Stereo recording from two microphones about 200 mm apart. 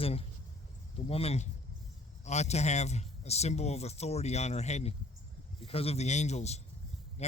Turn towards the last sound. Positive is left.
turn(degrees=35)  # may be behind; listen again after turning